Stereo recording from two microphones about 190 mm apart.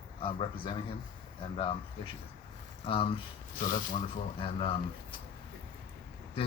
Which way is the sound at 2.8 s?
30° left (ahead or behind).